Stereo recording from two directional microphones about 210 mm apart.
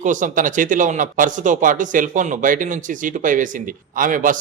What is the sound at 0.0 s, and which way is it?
Speech, 35° right (ahead or behind).